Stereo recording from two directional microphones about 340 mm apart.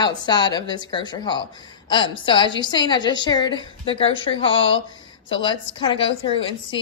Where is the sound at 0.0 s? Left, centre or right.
Centre.